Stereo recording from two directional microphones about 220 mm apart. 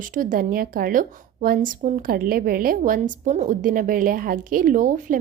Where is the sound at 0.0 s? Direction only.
40° right (ahead or behind).